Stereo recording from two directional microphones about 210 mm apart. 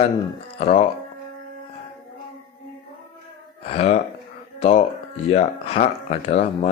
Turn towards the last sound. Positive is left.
turn(degrees=30)  # may be behind; listen again after turning